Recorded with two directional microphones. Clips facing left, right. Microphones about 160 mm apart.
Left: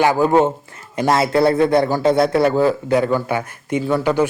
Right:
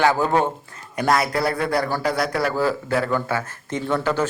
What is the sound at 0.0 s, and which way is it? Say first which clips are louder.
A man's voice: left 4 dB; 15° left (ahead or behind).